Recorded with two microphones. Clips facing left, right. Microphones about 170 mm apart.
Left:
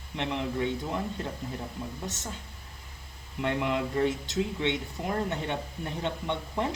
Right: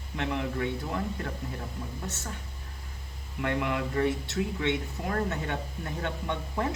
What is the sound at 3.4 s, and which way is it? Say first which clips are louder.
Speech: left 1 dB; 25° left (ahead or behind).